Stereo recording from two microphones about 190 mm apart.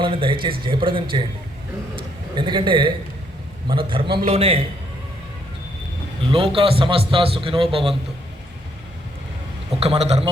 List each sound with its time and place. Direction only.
0.0 s a man's voice: 25° right (ahead or behind)
6.3 s a man's voice: 30° right (ahead or behind)
9.8 s a man's voice: 35° right (ahead or behind)